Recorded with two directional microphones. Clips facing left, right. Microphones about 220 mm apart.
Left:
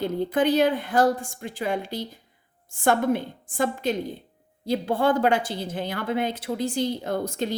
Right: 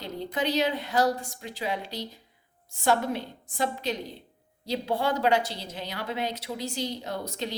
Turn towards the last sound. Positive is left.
turn(degrees=50)  # may be behind; listen again after turning